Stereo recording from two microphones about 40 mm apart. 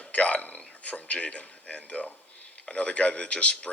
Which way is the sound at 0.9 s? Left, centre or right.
Left.